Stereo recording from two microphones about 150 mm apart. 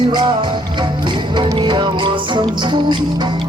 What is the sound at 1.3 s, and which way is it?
Music, 30° right (ahead or behind).